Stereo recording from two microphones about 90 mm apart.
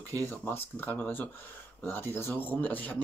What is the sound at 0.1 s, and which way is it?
Speech, 25° left (ahead or behind).